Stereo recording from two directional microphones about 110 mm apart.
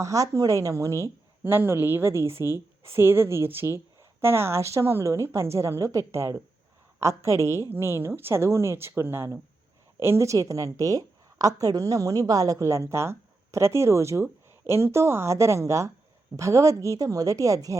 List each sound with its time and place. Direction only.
0.0 s a woman's voice: 30° right (ahead or behind)